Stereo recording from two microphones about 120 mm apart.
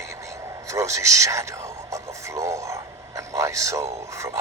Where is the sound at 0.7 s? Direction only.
25° right (ahead or behind).